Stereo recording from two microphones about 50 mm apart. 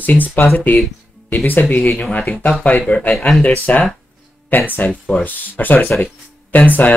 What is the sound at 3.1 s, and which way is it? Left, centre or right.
Speech, centre.